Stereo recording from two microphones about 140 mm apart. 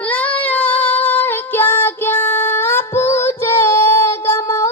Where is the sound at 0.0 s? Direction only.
10° left (ahead or behind).